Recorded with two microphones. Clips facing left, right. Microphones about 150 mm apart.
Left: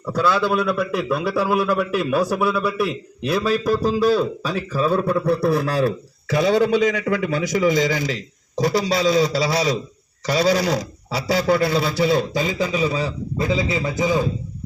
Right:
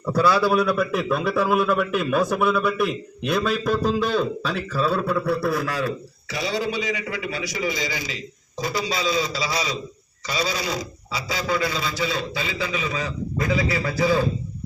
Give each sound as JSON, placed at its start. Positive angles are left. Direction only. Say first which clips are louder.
{"t": 0.0, "sound": "a man's voice", "louder": "even", "side_deg": -10}
{"t": 5.6, "sound": "a man's voice", "louder": "left 6 dB", "side_deg": 35}
{"t": 6.3, "sound": "a man's voice", "louder": "left 9 dB", "side_deg": 55}